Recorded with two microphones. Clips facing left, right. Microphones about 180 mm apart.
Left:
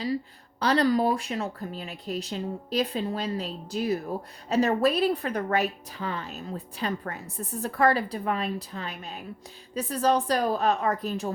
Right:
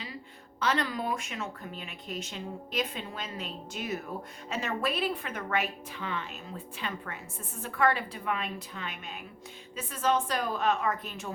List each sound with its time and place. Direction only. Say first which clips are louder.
0.6 s speech: left 8 dB; 35° left (ahead or behind)